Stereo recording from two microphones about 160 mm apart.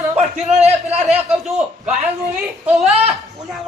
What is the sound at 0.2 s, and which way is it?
Speech, 40° right (ahead or behind).